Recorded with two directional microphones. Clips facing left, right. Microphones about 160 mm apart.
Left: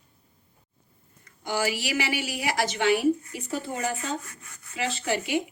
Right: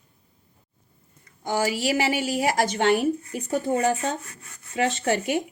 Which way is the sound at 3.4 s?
30° right (ahead or behind).